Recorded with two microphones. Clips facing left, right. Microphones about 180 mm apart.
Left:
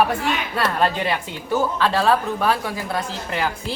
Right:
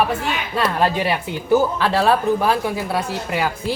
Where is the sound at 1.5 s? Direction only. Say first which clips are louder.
Right 3 dB; 15° right (ahead or behind).